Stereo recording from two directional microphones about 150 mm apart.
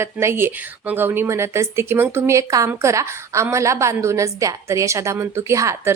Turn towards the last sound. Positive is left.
turn(degrees=-20)  # may be behind; listen again after turning